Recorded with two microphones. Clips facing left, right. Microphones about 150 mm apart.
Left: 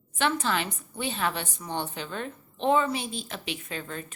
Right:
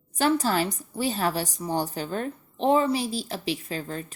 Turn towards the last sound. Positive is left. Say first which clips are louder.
# right 5 dB
turn(degrees=-35)  # may be behind; listen again after turning